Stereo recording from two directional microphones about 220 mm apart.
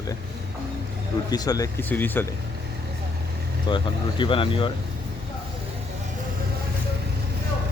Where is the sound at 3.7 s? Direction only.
20° left (ahead or behind).